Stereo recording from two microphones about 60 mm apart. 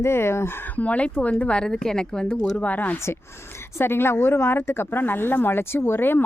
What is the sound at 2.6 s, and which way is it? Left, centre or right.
Speech, left.